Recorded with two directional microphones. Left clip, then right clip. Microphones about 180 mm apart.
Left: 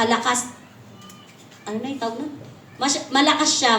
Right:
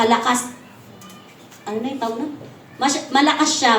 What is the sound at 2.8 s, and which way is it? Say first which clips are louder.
Speech: right 2 dB; 45° left (ahead or behind).